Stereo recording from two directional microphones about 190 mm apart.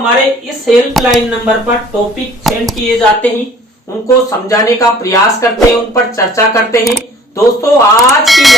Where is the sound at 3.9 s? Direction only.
15° left (ahead or behind).